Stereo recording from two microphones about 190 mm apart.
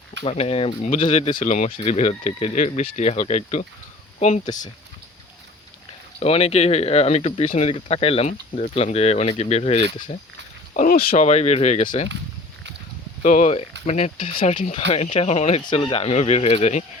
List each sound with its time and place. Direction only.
0.3 s speech: 30° left (ahead or behind)
6.1 s speech: 30° left (ahead or behind)
10.8 s speech: 45° left (ahead or behind)
11.1 s speech: 35° left (ahead or behind)
13.2 s speech: 40° left (ahead or behind)